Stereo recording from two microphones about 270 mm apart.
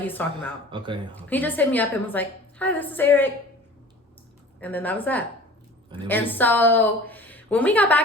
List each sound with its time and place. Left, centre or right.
0.0 s a woman's voice: centre
0.7 s speech: centre
1.1 s a woman's voice: centre
4.6 s a woman's voice: centre